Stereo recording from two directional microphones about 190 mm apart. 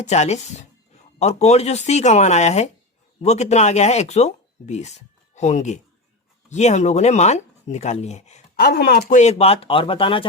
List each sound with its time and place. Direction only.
0.0 s speech: 35° left (ahead or behind)
8.5 s speech: 50° left (ahead or behind); by 10.2 s 25° left (ahead or behind)